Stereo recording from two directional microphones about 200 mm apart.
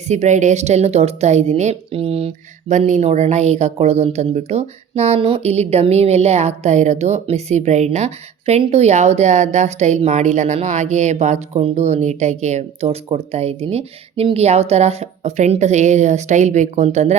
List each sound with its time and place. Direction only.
0.1 s a woman's voice: 35° right (ahead or behind)